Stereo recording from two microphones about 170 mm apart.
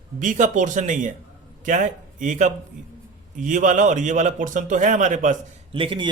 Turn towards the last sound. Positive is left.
turn(degrees=-30)  # may be behind; listen again after turning